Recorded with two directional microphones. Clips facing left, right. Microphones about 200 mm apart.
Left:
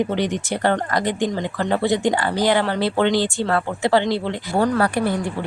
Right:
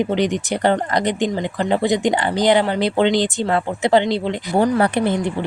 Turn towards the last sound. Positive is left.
turn(degrees=-20)  # may be behind; listen again after turning